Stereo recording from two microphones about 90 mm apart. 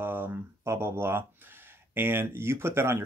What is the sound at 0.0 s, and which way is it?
Speech, 20° right (ahead or behind).